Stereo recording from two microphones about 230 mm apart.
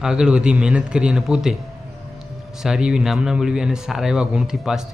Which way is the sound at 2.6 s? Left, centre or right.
Centre.